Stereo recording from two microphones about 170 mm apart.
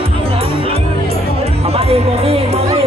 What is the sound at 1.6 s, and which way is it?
Music, 35° right (ahead or behind).